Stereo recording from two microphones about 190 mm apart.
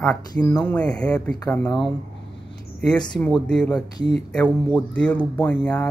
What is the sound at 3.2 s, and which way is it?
Speech, 5° left (ahead or behind).